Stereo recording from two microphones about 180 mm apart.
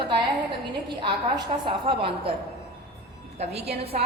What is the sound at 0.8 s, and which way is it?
A woman's voice, 25° right (ahead or behind).